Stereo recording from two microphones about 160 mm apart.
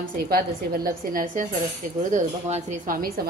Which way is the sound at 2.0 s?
50° right (ahead or behind).